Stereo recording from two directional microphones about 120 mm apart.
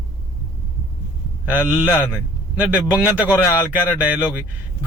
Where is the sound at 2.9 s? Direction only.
10° right (ahead or behind).